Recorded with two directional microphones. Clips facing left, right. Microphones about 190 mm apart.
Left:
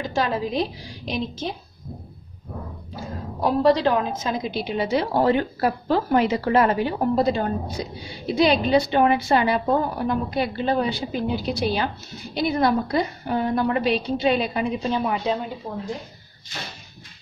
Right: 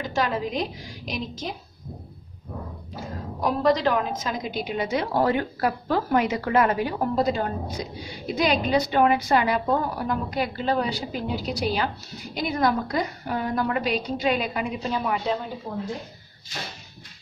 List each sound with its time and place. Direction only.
0.1 s a woman's voice: 30° left (ahead or behind)
3.3 s a woman's voice: 30° left (ahead or behind)